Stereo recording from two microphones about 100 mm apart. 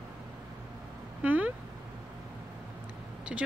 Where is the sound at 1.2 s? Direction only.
15° right (ahead or behind).